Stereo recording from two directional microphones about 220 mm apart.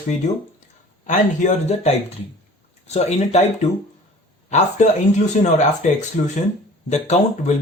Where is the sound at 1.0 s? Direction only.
35° left (ahead or behind).